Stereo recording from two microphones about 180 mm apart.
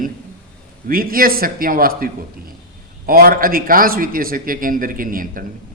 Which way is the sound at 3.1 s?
55° right (ahead or behind).